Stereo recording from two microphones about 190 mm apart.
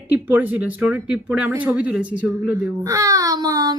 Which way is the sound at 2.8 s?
15° right (ahead or behind).